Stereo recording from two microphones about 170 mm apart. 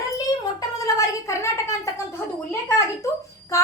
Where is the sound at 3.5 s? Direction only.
15° left (ahead or behind).